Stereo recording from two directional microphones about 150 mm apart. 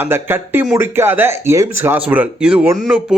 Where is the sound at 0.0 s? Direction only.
15° right (ahead or behind).